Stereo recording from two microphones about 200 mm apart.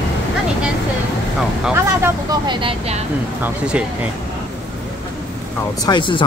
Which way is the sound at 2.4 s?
25° right (ahead or behind).